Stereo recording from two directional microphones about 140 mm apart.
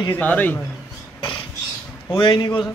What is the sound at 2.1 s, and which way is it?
Speech, 40° left (ahead or behind).